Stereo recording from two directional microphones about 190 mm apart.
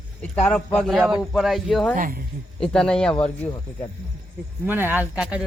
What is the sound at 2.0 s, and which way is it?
Speech, 45° right (ahead or behind).